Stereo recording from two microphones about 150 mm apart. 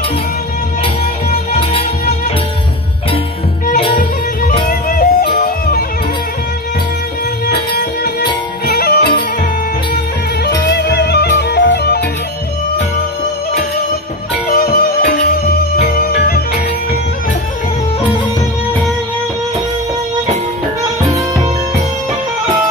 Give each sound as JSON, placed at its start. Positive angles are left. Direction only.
{"t": 1.6, "sound": "music", "side_deg": 35}
{"t": 3.9, "sound": "music", "side_deg": 75}
{"t": 4.6, "sound": "music", "side_deg": 65}
{"t": 8.0, "sound": "music", "side_deg": 90}
{"t": 10.8, "sound": "music", "side_deg": 90}
{"t": 14.5, "sound": "music", "side_deg": 85}